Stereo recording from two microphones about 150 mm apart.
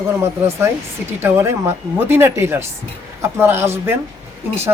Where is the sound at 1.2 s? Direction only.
15° right (ahead or behind).